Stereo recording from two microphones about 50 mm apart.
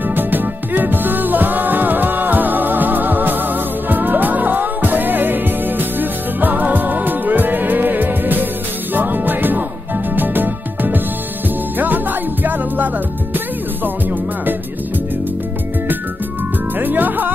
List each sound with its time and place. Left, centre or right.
0.1 s music: right
12.4 s music: right
16.8 s music: right